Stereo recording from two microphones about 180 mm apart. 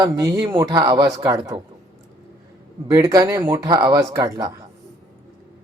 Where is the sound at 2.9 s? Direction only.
20° right (ahead or behind).